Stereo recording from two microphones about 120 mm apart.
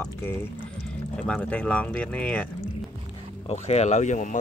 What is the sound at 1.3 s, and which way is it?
Speech, 10° left (ahead or behind).